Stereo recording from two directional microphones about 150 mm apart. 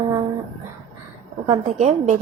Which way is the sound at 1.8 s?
50° right (ahead or behind).